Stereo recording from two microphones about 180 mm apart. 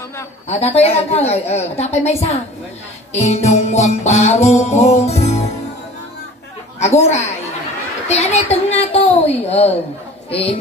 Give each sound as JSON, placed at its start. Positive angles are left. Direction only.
{"t": 0.5, "sound": "music", "side_deg": 35}
{"t": 6.8, "sound": "music", "side_deg": 40}